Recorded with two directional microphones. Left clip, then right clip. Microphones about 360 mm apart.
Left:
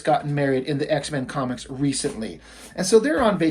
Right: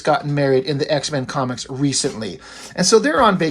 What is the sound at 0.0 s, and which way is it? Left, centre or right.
Speech, centre.